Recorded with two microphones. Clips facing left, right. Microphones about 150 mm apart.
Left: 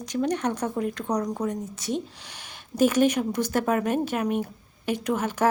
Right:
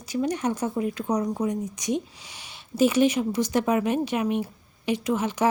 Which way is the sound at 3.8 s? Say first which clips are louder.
Right 1 dB; 45° left (ahead or behind).